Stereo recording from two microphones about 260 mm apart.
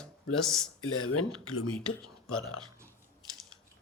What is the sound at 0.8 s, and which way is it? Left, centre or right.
Speech, left.